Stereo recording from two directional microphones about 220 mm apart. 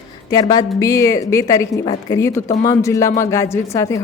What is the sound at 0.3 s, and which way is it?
A woman's voice, 15° left (ahead or behind).